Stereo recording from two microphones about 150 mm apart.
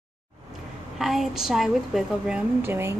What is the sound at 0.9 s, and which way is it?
A woman's voice, centre (ahead or behind).